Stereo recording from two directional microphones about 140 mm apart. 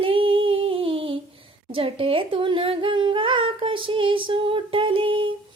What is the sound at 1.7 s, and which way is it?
Speech, 40° right (ahead or behind).